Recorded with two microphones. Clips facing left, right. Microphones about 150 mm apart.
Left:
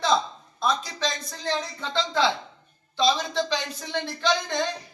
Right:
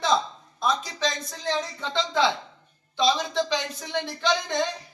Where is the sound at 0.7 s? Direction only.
20° right (ahead or behind).